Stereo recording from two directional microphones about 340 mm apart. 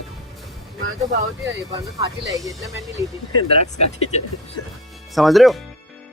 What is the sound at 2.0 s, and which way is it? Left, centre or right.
Speech, centre.